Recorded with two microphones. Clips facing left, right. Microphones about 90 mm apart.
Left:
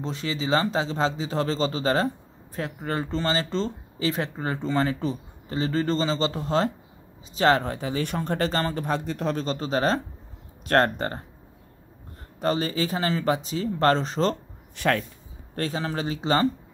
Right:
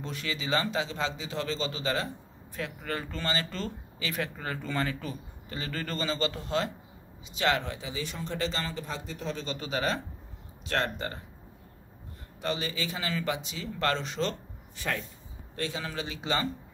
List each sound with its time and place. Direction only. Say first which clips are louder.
0.0 s speech: left 6 dB; 30° left (ahead or behind); by 9.4 s 60° left (ahead or behind)
9.4 s speech: left 5 dB; 40° left (ahead or behind)
10.7 s speech: left 9 dB; 50° left (ahead or behind)
12.4 s speech: left 8 dB; 40° left (ahead or behind)
14.8 s speech: left 9 dB; 70° left (ahead or behind)
15.5 s speech: left 6 dB; 40° left (ahead or behind)